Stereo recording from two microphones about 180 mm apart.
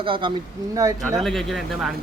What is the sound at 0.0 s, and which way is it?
Speech, 30° right (ahead or behind).